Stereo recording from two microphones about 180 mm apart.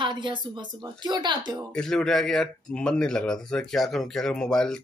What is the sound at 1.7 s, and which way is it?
A man's voice, centre (ahead or behind).